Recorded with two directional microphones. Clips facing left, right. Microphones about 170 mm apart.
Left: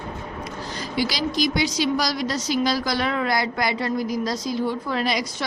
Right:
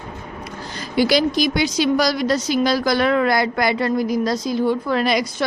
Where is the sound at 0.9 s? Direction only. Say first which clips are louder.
Right 7 dB; 55° right (ahead or behind).